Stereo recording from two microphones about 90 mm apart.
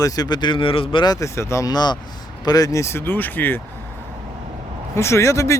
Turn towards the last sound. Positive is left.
turn(degrees=35)  # may be behind; listen again after turning